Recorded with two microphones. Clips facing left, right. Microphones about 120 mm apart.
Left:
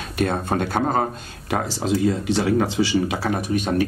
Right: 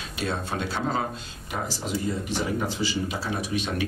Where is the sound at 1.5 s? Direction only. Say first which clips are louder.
Left 8 dB; 90° left.